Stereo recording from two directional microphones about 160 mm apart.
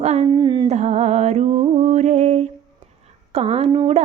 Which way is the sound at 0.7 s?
45° right (ahead or behind).